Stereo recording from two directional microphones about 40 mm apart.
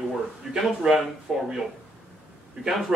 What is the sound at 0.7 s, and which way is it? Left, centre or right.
A man's voice, centre.